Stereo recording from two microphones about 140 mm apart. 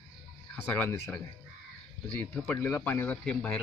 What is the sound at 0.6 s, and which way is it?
Speech, 15° left (ahead or behind).